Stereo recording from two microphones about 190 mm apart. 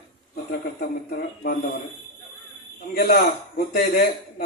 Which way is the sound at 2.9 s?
55° left (ahead or behind).